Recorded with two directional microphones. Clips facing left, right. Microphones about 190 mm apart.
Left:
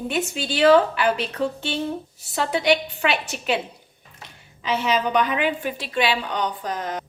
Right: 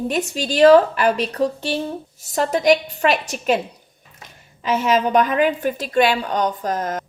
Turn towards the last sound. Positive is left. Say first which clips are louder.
# right 5 dB
turn(degrees=-45)  # may be behind; listen again after turning